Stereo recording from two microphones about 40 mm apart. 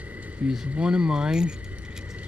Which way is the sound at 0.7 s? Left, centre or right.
Centre.